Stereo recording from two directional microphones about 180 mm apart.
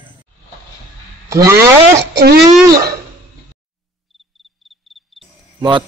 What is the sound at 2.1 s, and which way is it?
Speech, 60° right (ahead or behind).